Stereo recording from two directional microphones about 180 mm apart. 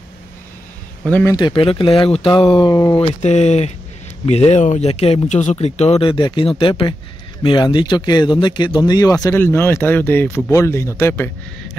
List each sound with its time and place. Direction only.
1.0 s a man's voice: 10° left (ahead or behind)
1.3 s speech: 25° left (ahead or behind)